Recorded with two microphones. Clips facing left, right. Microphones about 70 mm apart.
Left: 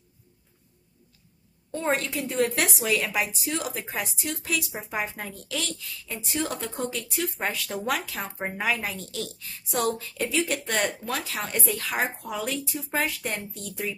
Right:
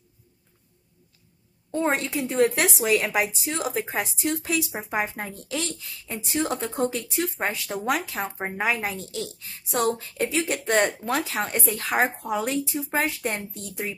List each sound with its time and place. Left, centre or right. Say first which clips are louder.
1.7 s speech: right 2 dB; right